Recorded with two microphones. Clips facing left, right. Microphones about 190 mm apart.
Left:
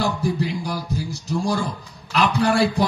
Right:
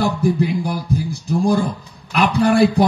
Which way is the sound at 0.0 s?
55° right (ahead or behind).